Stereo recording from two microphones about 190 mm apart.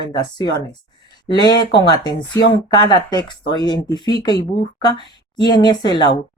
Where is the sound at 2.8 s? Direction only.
25° left (ahead or behind).